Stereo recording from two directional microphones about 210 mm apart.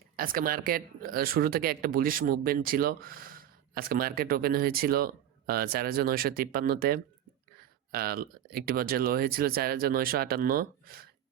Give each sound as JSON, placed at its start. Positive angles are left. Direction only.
{"t": 0.2, "sound": "speech", "side_deg": -45}